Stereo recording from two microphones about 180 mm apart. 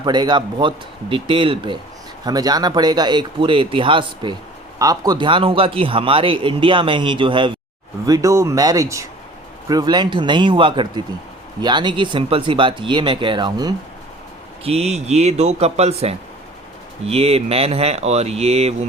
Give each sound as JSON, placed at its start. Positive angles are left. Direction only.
{"t": 0.0, "sound": "speech", "side_deg": -25}
{"t": 14.6, "sound": "speech", "side_deg": -35}